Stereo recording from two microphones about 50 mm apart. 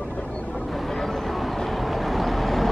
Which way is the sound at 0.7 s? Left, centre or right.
Centre.